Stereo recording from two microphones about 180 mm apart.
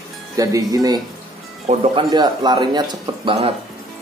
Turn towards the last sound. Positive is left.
turn(degrees=-25)  # may be behind; listen again after turning